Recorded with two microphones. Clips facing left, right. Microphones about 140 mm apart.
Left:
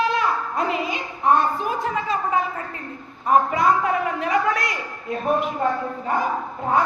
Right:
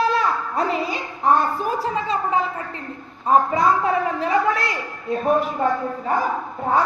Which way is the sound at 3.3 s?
30° right (ahead or behind).